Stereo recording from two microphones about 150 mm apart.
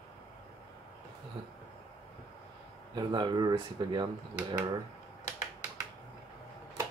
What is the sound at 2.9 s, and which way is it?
Speech, 30° right (ahead or behind).